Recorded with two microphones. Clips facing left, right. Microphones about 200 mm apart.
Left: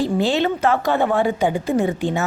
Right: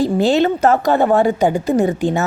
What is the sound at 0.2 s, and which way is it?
A woman's voice, 40° right (ahead or behind).